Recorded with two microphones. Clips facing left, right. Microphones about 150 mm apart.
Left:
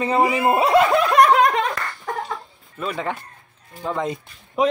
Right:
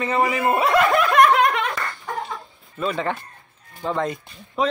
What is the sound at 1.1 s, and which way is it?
Laughter, 35° left (ahead or behind).